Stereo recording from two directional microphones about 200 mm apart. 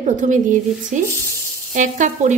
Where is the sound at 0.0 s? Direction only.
40° right (ahead or behind).